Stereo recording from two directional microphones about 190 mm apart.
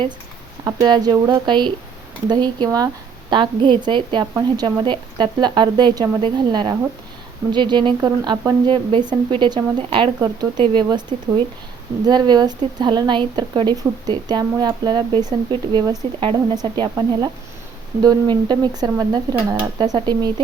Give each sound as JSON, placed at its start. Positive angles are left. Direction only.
{"t": 0.6, "sound": "a woman's voice", "side_deg": -20}
{"t": 12.0, "sound": "a woman's voice", "side_deg": -20}